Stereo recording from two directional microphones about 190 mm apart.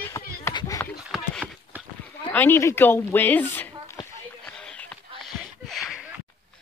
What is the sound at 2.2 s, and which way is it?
Speech, 10° left (ahead or behind).